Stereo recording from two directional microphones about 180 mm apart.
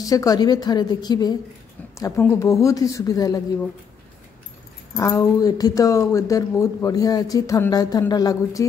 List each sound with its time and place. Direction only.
0.0 s speech: 20° left (ahead or behind)
4.9 s speech: 15° left (ahead or behind)